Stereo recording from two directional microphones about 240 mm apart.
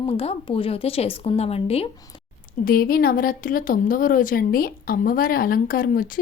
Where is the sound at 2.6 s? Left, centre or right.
Left.